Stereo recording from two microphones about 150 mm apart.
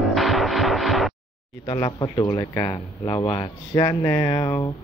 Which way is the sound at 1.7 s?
30° left (ahead or behind).